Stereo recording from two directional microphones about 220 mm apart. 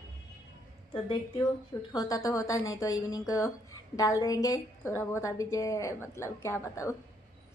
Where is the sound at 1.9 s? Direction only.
15° left (ahead or behind).